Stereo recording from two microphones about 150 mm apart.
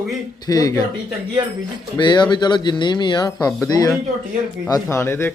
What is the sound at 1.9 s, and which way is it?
A man's voice, 30° left (ahead or behind).